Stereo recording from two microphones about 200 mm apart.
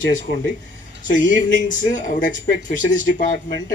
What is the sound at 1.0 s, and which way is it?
Speech, 40° left (ahead or behind).